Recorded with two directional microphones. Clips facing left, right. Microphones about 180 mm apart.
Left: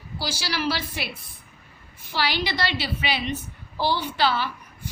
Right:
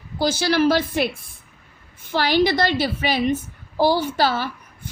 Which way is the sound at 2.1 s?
50° right (ahead or behind).